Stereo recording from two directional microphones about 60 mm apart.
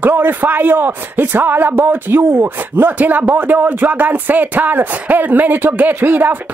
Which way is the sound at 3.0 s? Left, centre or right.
Right.